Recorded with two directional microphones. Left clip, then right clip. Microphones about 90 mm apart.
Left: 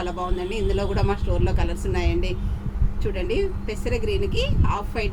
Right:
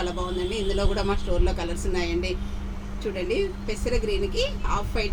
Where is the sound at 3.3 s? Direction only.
60° left (ahead or behind).